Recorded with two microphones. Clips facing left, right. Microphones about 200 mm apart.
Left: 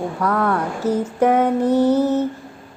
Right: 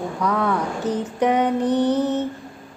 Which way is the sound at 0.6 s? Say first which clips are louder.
Left 3 dB; 5° left (ahead or behind).